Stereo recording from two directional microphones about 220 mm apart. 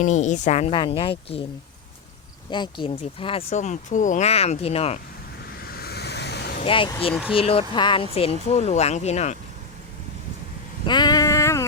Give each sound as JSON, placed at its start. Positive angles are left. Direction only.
{"t": 0.0, "sound": "speech", "side_deg": 35}
{"t": 2.5, "sound": "speech", "side_deg": 20}
{"t": 5.5, "sound": "vehicle", "side_deg": 45}
{"t": 6.6, "sound": "speech", "side_deg": 25}
{"t": 10.8, "sound": "a sound", "side_deg": 20}